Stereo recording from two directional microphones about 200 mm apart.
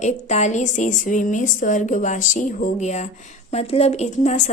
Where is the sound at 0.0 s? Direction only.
35° left (ahead or behind).